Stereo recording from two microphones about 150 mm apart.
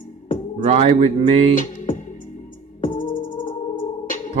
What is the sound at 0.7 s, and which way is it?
Speech, 45° right (ahead or behind).